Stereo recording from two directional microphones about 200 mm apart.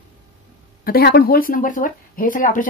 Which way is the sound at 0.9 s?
50° left (ahead or behind).